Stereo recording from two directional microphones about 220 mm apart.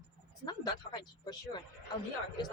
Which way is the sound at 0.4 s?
20° left (ahead or behind).